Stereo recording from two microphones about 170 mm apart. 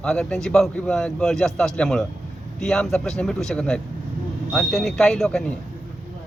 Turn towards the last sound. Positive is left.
turn(degrees=5)  # may be behind; listen again after turning